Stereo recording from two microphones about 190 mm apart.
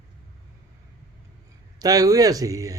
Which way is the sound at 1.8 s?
20° right (ahead or behind).